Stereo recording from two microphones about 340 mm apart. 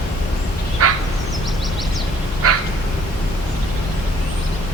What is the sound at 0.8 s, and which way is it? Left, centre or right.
Fowl, right.